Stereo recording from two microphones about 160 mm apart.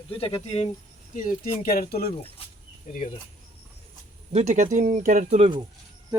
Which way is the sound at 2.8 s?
50° left (ahead or behind).